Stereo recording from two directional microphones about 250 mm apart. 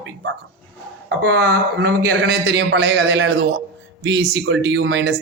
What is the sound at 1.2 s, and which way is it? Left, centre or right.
Speech, right.